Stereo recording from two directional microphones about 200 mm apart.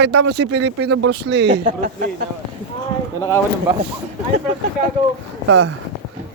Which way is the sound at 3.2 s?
15° left (ahead or behind).